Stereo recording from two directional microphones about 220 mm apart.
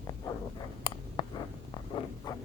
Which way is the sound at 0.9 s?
20° left (ahead or behind).